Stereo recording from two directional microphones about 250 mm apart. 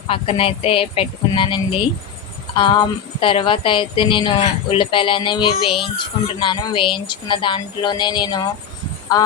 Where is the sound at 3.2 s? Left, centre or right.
Left.